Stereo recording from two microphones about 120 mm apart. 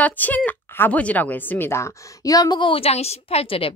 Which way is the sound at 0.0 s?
15° left (ahead or behind).